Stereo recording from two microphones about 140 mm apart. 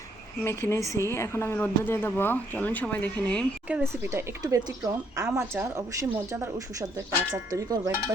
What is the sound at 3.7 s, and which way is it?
Speech, 15° right (ahead or behind).